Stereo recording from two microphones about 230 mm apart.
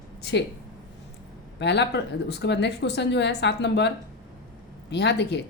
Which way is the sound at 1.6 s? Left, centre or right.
Left.